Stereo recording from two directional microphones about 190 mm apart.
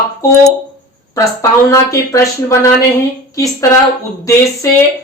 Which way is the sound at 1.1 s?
15° left (ahead or behind).